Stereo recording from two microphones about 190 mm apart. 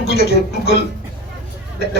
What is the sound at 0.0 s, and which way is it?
Speech, 55° left (ahead or behind).